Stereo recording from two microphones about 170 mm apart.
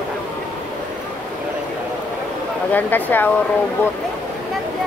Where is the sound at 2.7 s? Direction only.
10° left (ahead or behind).